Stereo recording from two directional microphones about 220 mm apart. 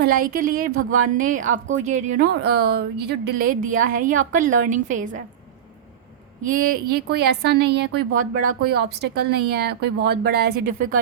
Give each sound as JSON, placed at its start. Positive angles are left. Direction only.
{"t": 0.0, "sound": "a woman's voice", "side_deg": -40}
{"t": 6.4, "sound": "a woman's voice", "side_deg": -40}